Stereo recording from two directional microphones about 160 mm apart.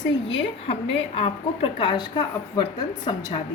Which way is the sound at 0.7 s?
35° left (ahead or behind).